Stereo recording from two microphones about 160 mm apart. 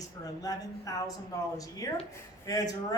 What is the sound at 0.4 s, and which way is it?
A man's voice, 20° left (ahead or behind).